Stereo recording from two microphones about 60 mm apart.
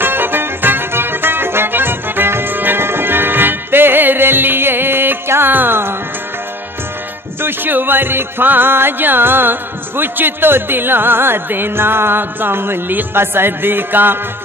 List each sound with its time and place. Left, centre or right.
0.0 s music: right
7.4 s music: right